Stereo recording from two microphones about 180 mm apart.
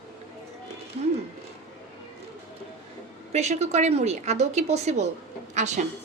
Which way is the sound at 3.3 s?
40° right (ahead or behind).